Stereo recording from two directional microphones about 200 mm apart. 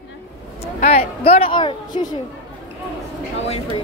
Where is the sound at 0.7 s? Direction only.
30° left (ahead or behind).